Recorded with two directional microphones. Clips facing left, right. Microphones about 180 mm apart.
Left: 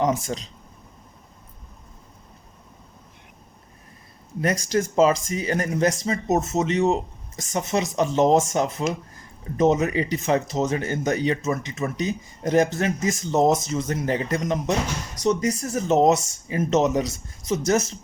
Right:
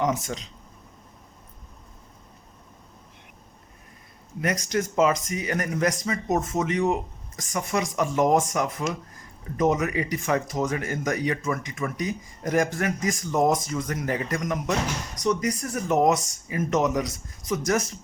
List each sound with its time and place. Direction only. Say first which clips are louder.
0.0 s speech: left 3 dB; 35° left (ahead or behind)
4.4 s speech: left 3 dB; 30° left (ahead or behind)